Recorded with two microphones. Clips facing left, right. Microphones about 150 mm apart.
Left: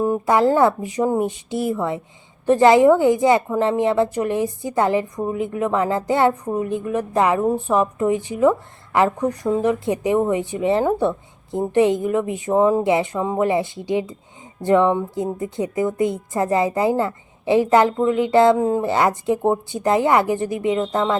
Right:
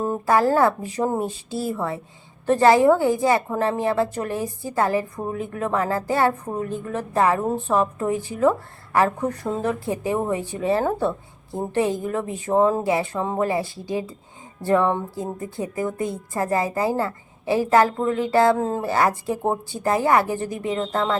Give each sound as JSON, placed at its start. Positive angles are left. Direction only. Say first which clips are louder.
{"t": 0.0, "sound": "a woman's voice", "louder": "left 3 dB", "side_deg": 15}